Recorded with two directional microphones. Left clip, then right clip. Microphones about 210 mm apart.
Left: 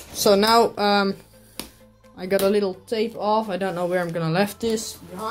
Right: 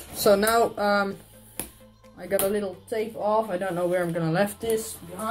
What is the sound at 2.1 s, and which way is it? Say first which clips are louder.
Speech: left 5 dB; 35° left (ahead or behind).